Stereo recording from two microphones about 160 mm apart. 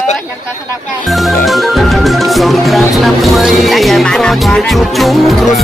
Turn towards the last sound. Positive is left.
turn(degrees=0)  # may be behind; listen again after turning